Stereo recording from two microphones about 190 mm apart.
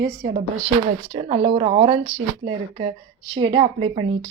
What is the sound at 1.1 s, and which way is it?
Speech, 30° right (ahead or behind).